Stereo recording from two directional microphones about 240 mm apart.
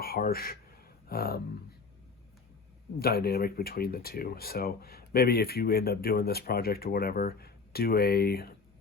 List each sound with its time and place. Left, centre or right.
0.0 s speech: left
3.0 s speech: left